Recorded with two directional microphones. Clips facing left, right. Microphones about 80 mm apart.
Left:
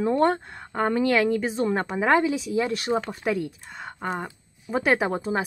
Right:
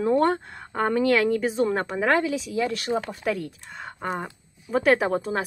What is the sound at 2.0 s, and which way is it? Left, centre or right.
Speech, centre.